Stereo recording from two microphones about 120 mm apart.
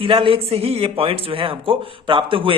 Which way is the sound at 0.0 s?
45° right (ahead or behind).